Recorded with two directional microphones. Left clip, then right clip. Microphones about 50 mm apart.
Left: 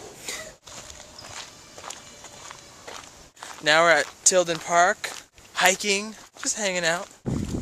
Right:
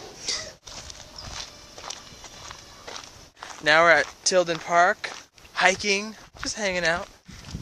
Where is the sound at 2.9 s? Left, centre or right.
Centre.